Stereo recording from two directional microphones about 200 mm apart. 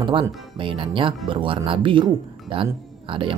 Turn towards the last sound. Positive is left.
turn(degrees=-25)  # may be behind; listen again after turning